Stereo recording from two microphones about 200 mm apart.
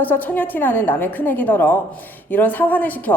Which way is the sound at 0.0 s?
10° left (ahead or behind).